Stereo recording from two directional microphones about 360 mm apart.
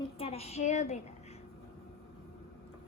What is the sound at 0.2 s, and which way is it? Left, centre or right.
Speech, centre.